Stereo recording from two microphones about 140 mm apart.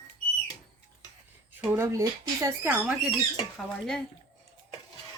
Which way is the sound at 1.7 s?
20° right (ahead or behind).